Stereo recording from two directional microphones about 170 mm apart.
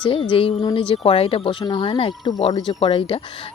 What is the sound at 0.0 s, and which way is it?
Speech, 30° left (ahead or behind).